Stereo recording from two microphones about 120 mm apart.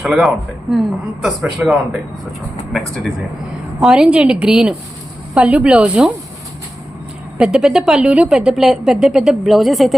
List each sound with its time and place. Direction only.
0.0 s a woman's voice: centre (ahead or behind)
7.3 s speech: 5° right (ahead or behind)